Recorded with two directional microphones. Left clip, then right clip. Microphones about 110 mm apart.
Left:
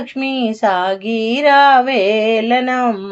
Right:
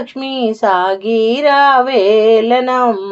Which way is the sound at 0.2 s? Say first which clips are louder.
Right 1 dB; 35° right (ahead or behind).